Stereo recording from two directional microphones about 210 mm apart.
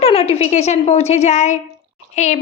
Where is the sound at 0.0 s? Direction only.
30° left (ahead or behind).